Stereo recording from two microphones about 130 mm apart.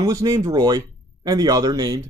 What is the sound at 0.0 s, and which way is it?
Speech, 30° right (ahead or behind).